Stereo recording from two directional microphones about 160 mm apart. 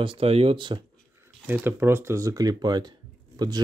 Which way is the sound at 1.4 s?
15° right (ahead or behind).